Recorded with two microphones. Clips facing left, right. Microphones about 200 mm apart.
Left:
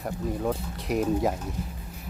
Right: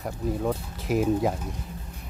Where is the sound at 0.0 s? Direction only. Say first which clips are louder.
Right 1 dB; centre (ahead or behind).